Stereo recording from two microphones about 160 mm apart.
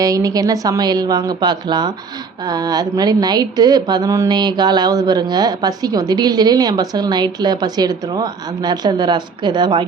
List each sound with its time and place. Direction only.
0.0 s a woman's voice: 20° right (ahead or behind)